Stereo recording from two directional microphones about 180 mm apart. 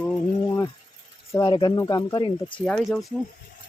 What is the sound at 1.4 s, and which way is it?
Speech, 25° left (ahead or behind).